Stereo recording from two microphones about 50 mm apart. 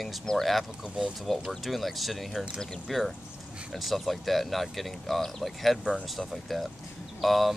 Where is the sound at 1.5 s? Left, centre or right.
Centre.